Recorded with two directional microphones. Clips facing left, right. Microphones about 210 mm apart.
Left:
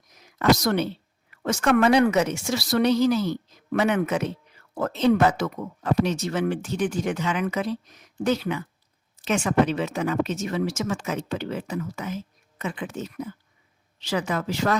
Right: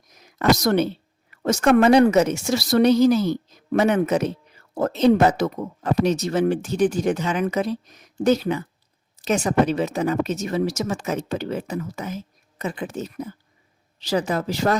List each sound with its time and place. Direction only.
0.2 s a woman's voice: 40° right (ahead or behind)